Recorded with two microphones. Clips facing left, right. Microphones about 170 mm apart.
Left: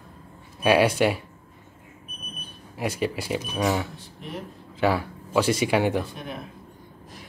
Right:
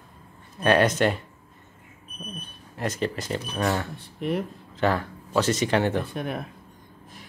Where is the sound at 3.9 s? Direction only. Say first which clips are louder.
Right 9 dB; 60° right (ahead or behind).